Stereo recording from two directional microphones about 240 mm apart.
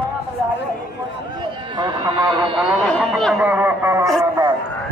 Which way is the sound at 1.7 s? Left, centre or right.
Centre.